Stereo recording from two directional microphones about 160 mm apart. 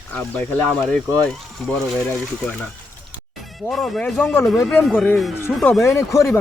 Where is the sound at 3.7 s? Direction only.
Centre (ahead or behind).